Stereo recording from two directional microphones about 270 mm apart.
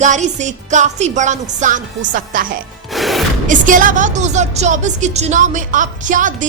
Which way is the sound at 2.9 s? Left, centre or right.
Centre.